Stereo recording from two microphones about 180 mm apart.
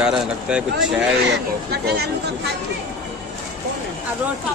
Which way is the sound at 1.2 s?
65° right (ahead or behind).